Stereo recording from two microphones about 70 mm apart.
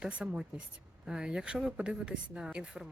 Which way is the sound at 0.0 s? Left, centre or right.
Centre.